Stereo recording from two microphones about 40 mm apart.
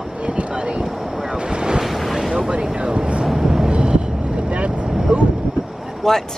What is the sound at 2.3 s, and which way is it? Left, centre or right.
Speech, right.